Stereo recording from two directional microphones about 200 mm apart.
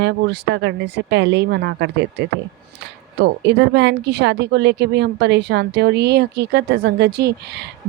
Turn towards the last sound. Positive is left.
turn(degrees=-55)  # may be behind; listen again after turning